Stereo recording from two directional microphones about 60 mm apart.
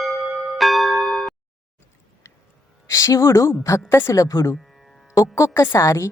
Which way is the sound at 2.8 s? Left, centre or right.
Left.